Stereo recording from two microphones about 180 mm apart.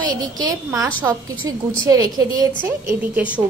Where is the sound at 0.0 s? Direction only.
20° right (ahead or behind).